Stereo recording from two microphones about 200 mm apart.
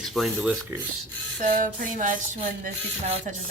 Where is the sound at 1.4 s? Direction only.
40° right (ahead or behind).